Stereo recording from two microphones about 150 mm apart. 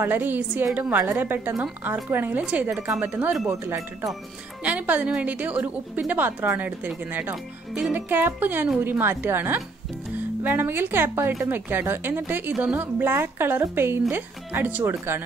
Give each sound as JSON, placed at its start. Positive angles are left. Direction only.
{"t": 0.0, "sound": "speech", "side_deg": -10}